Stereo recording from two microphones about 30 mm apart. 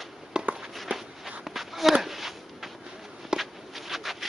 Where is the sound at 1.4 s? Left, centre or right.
Centre.